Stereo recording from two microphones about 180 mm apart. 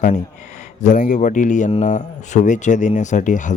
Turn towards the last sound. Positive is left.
turn(degrees=45)  # may be behind; listen again after turning